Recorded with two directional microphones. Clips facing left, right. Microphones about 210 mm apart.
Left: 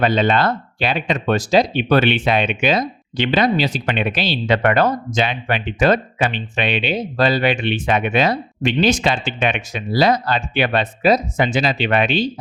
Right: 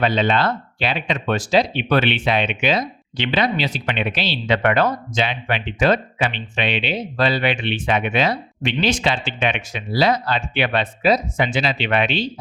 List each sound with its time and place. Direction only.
0.0 s speech: 50° left (ahead or behind)